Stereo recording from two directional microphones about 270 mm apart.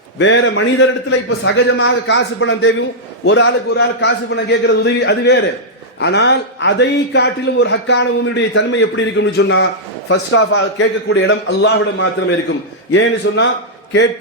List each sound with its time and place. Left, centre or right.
0.2 s a man's voice: left